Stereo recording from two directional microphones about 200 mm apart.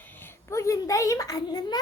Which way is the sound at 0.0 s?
10° left (ahead or behind).